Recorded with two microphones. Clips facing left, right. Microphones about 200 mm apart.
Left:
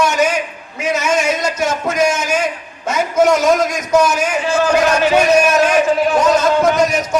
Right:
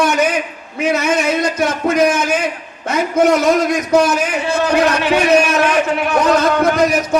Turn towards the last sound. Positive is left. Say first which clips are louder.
# even
turn(degrees=-60)  # may be behind; listen again after turning